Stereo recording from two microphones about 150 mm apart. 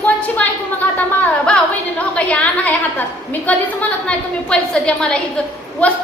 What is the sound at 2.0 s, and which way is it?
A woman's voice, 10° left (ahead or behind).